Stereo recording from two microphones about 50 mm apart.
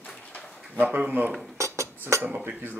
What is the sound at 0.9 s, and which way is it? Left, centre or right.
Speech, right.